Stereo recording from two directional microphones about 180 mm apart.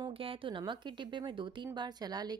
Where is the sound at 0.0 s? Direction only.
30° right (ahead or behind).